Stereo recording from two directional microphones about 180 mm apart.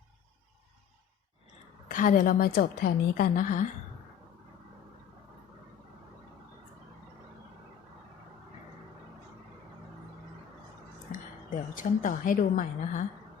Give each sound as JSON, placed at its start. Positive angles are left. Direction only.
{"t": 1.9, "sound": "a woman's voice", "side_deg": 45}
{"t": 11.7, "sound": "a woman's voice", "side_deg": 50}